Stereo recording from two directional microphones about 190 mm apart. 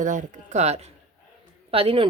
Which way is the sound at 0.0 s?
40° right (ahead or behind).